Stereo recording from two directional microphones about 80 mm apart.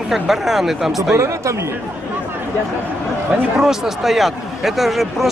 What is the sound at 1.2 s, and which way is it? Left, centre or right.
Speech, right.